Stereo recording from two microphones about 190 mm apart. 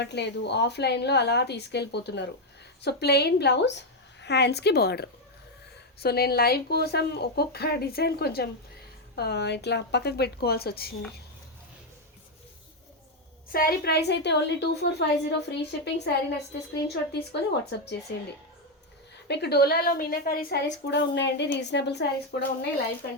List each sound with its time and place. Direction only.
0.0 s a woman's voice: 65° left (ahead or behind)
13.5 s a woman's voice: 50° left (ahead or behind)
19.3 s a woman's voice: 60° left (ahead or behind)
20.8 s a woman's voice: 65° left (ahead or behind)